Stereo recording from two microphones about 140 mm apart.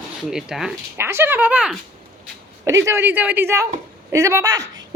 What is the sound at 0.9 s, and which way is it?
Speech, 15° right (ahead or behind).